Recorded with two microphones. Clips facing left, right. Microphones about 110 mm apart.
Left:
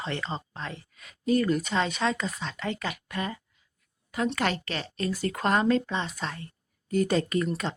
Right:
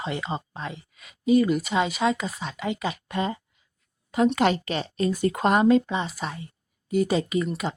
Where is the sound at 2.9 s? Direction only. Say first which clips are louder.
Right 5 dB; 25° right (ahead or behind).